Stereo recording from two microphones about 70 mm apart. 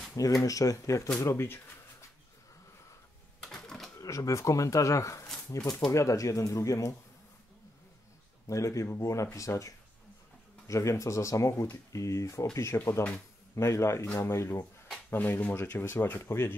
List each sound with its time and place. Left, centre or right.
0.1 s speech: left
3.4 s typewriter: centre
4.0 s speech: left
8.5 s speech: left
12.7 s speech: left
13.6 s speech: left
15.0 s speech: left